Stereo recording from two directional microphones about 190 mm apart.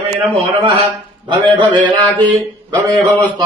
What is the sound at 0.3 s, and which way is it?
A man's voice, 30° right (ahead or behind).